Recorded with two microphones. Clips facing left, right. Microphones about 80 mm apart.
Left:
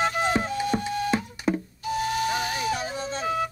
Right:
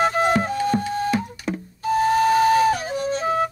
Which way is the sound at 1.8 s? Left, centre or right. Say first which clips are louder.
Right 11 dB; right.